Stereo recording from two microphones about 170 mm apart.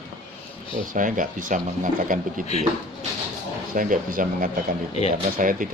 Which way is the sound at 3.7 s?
50° right (ahead or behind).